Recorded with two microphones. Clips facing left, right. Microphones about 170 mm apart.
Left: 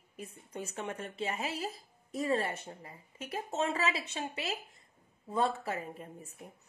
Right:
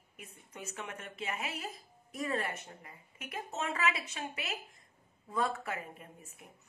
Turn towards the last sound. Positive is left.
turn(degrees=30)  # may be behind; listen again after turning